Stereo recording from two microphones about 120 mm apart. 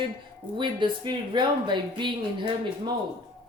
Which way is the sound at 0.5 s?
40° right (ahead or behind).